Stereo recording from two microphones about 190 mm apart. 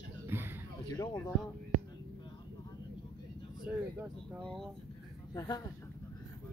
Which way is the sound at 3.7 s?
5° right (ahead or behind).